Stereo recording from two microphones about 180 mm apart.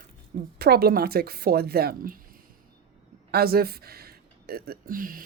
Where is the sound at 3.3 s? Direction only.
60° right (ahead or behind).